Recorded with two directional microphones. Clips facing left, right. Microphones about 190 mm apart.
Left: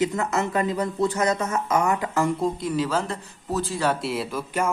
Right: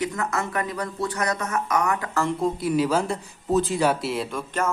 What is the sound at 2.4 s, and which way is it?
Speech, 5° right (ahead or behind).